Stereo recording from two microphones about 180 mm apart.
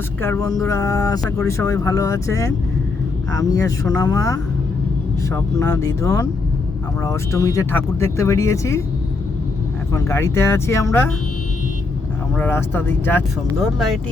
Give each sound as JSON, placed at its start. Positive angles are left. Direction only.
{"t": 0.2, "sound": "speech", "side_deg": 15}
{"t": 9.9, "sound": "speech", "side_deg": 15}
{"t": 12.4, "sound": "speech", "side_deg": 10}